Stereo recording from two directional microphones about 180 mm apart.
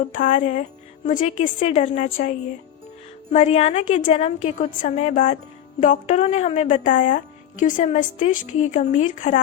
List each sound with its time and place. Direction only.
0.1 s a woman's voice: 45° left (ahead or behind)